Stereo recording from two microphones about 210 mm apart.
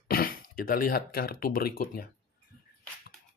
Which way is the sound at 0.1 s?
45° left (ahead or behind).